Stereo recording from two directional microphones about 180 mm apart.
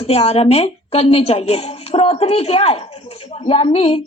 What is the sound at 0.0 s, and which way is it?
A woman's voice, 35° left (ahead or behind).